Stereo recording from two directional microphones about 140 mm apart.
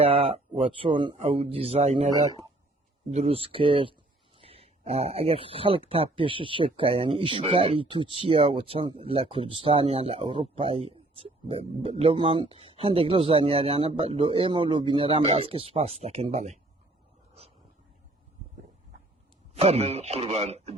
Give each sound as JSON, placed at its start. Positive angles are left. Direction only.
{"t": 0.0, "sound": "a man's voice", "side_deg": -45}
{"t": 3.1, "sound": "a man's voice", "side_deg": -45}
{"t": 19.5, "sound": "a man's voice", "side_deg": -45}